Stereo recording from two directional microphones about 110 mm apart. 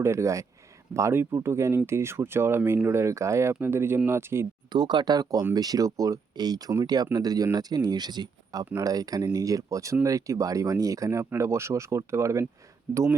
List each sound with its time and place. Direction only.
0.0 s speech: 25° right (ahead or behind)
4.7 s speech: 40° right (ahead or behind); by 12.5 s 25° right (ahead or behind)